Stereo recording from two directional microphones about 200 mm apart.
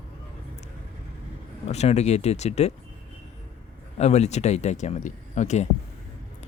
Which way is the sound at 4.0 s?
35° left (ahead or behind).